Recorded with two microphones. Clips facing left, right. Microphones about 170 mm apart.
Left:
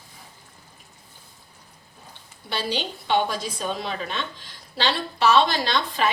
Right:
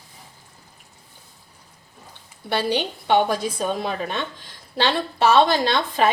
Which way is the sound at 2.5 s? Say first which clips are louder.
Right 5 dB; 60° right (ahead or behind).